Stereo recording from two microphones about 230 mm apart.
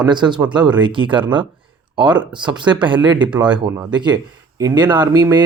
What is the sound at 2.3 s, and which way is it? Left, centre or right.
Speech, centre.